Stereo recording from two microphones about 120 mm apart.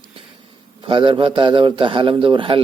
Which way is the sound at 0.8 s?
45° right (ahead or behind).